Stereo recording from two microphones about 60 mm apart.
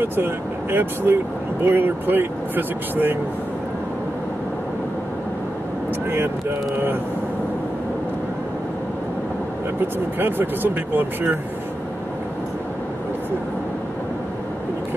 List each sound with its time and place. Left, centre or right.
0.0 s speech: right
9.9 s speech: right